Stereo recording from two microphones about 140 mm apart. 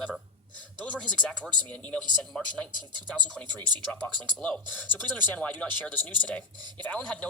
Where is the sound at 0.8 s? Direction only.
10° left (ahead or behind).